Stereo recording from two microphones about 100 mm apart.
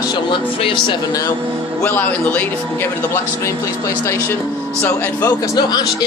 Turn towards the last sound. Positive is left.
turn(degrees=45)  # may be behind; listen again after turning